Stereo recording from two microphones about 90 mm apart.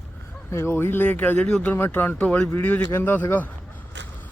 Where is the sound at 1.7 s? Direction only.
25° left (ahead or behind).